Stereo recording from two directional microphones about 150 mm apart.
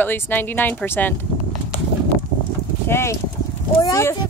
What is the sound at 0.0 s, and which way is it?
Speech, 15° left (ahead or behind).